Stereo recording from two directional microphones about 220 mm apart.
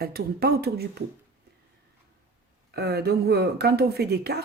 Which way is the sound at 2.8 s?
45° right (ahead or behind).